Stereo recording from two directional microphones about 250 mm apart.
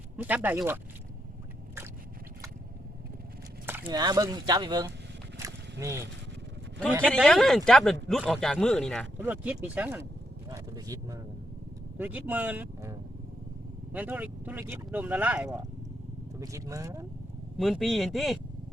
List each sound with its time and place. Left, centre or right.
0.2 s speech: centre
3.8 s speech: centre
7.1 s a man's voice: centre
9.1 s speech: centre
10.5 s a sound: centre
11.9 s speech: centre
17.6 s a man's voice: centre